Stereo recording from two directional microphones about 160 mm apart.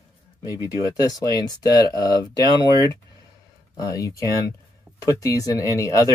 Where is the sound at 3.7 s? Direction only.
25° left (ahead or behind).